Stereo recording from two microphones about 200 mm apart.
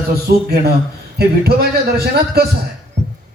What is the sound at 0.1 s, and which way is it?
A man's voice, 50° right (ahead or behind).